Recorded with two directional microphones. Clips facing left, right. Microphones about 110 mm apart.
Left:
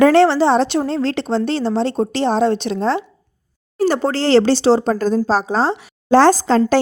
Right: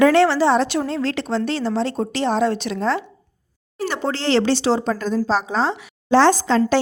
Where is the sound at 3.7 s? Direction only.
40° left (ahead or behind).